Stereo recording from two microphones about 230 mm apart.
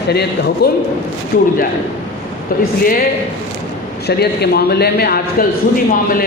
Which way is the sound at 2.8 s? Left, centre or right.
Left.